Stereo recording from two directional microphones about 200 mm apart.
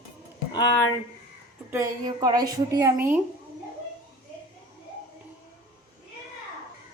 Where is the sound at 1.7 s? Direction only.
20° right (ahead or behind).